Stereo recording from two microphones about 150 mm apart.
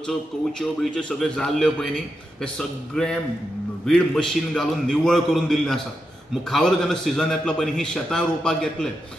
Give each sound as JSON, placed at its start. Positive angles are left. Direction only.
{"t": 0.0, "sound": "a man's voice", "side_deg": 5}